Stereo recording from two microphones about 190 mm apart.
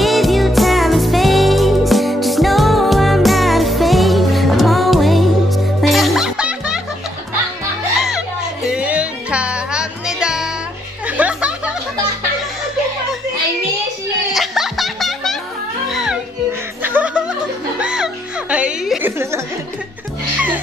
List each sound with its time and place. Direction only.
0.0 s music: centre (ahead or behind)
8.6 s music: 5° right (ahead or behind)
14.3 s music: centre (ahead or behind)